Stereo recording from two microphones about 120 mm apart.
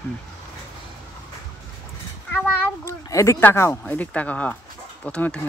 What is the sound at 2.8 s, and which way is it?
Speech, 25° left (ahead or behind).